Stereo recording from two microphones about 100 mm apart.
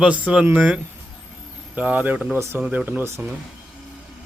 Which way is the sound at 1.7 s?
15° right (ahead or behind).